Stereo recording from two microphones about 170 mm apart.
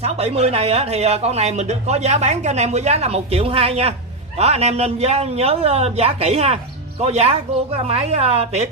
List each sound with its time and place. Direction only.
0.0 s a man's voice: 35° right (ahead or behind)